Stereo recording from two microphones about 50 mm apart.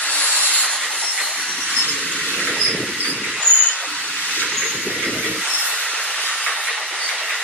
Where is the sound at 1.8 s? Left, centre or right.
Left.